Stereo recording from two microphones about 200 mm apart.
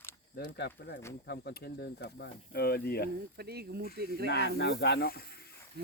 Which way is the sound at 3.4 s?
55° right (ahead or behind).